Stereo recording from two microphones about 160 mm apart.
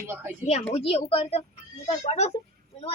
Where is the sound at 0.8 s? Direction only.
40° left (ahead or behind).